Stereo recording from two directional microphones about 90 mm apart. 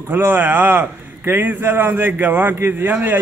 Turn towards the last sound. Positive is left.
turn(degrees=-25)  # may be behind; listen again after turning